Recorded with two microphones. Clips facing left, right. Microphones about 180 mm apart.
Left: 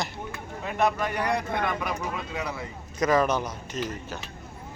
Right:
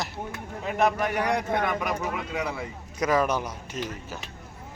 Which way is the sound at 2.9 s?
10° right (ahead or behind).